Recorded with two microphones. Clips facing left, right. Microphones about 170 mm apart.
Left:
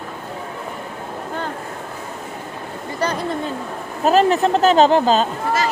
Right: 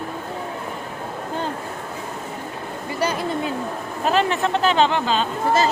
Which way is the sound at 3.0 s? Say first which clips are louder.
Left 1 dB; 10° right (ahead or behind).